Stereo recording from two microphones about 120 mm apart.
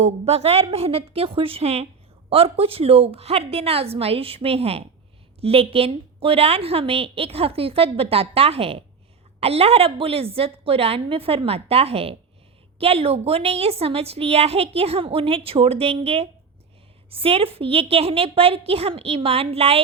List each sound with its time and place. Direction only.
0.0 s a woman's voice: 60° right (ahead or behind)